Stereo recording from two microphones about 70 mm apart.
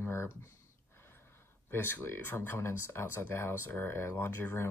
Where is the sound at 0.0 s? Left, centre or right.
Left.